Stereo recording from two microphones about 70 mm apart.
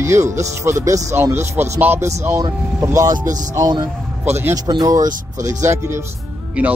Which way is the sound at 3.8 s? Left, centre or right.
Right.